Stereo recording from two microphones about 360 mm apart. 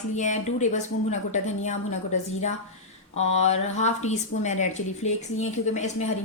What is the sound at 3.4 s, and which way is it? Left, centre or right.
Speech, centre.